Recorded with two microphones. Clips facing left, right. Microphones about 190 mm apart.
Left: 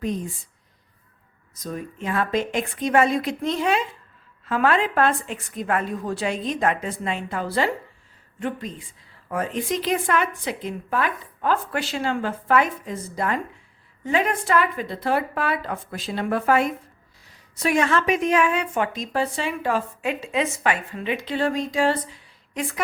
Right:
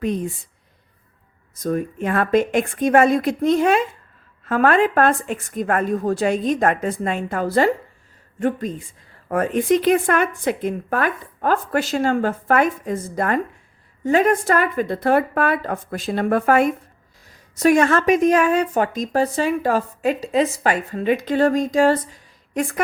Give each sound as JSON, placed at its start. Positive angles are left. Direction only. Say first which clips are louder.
{"t": 0.0, "sound": "speech", "louder": "right 4 dB", "side_deg": -65}
{"t": 1.5, "sound": "a woman's voice", "louder": "right 9 dB", "side_deg": -50}